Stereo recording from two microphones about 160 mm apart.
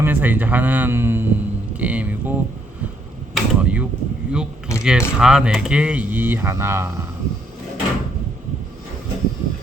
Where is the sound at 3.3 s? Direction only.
10° right (ahead or behind).